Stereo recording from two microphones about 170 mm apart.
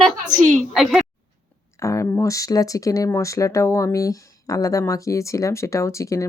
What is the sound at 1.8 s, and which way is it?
Speech, 20° left (ahead or behind).